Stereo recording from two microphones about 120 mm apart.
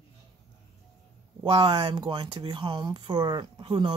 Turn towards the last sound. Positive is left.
turn(degrees=-45)  # may be behind; listen again after turning